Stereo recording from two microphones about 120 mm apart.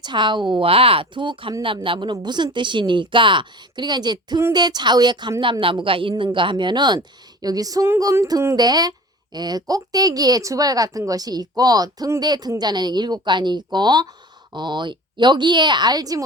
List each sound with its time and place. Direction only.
0.0 s speech: 40° right (ahead or behind)
0.7 s speech: 50° right (ahead or behind); by 16.2 s 30° right (ahead or behind)